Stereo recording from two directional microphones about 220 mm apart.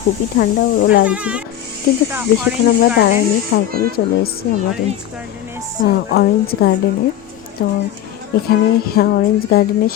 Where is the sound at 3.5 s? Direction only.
45° left (ahead or behind).